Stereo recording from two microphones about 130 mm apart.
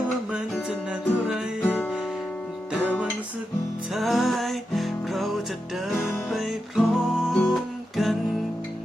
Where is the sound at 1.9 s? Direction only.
Centre (ahead or behind).